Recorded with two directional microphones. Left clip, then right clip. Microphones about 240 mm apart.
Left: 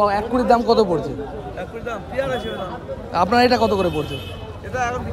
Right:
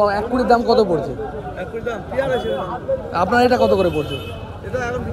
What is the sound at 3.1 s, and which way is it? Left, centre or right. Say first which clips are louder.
Speech: even; left.